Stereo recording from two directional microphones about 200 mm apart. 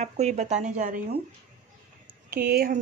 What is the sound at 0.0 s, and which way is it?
Speech, 35° right (ahead or behind).